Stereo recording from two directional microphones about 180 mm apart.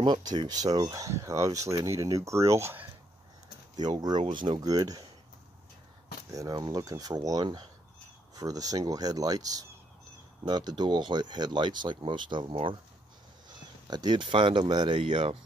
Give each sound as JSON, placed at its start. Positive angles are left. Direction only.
{"t": 0.0, "sound": "speech", "side_deg": -25}
{"t": 3.8, "sound": "speech", "side_deg": -25}
{"t": 6.3, "sound": "speech", "side_deg": -20}
{"t": 13.8, "sound": "speech", "side_deg": -25}